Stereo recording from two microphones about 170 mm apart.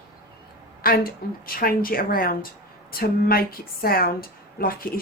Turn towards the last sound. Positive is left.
turn(degrees=60)  # may be behind; listen again after turning